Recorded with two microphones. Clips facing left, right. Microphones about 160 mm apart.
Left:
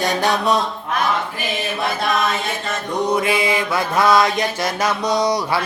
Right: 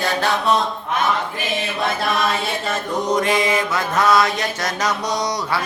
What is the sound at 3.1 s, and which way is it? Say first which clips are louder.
Mantra: right 2 dB; 10° left (ahead or behind).